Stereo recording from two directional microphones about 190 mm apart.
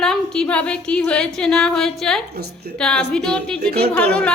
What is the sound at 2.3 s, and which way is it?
Speech, 55° right (ahead or behind).